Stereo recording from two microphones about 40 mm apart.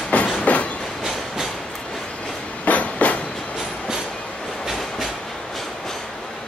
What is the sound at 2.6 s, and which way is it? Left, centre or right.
Train, left.